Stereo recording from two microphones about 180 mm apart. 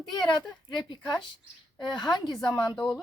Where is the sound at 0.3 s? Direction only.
25° left (ahead or behind).